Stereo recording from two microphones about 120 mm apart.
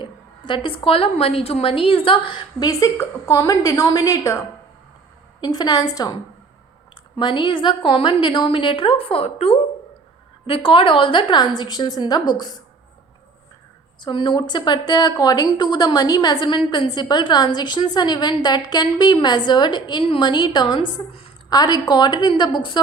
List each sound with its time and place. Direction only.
0.0 s a woman's voice: 45° left (ahead or behind)
7.2 s a woman's voice: 40° left (ahead or behind)
14.0 s a woman's voice: 40° left (ahead or behind)